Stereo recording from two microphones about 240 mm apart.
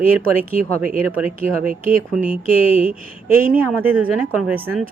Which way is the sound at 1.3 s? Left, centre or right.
Right.